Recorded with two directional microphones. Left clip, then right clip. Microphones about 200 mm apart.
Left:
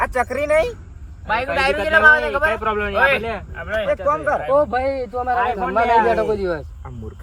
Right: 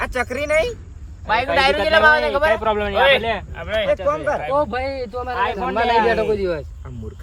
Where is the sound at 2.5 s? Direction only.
50° right (ahead or behind).